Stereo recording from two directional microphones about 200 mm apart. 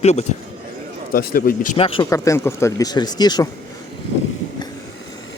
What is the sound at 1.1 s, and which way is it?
Speech, 45° left (ahead or behind).